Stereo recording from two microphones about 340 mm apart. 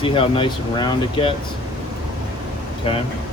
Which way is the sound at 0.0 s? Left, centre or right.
Centre.